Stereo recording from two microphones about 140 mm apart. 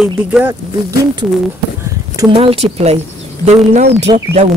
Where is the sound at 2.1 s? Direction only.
40° right (ahead or behind).